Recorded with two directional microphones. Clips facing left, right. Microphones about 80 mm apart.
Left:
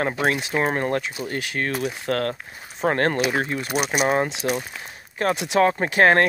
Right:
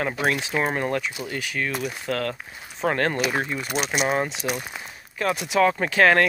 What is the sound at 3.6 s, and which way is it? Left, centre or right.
Speech, centre.